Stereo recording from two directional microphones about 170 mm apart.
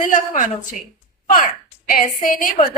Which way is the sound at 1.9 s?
50° left (ahead or behind).